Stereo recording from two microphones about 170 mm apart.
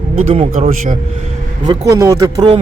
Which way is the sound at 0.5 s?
50° right (ahead or behind).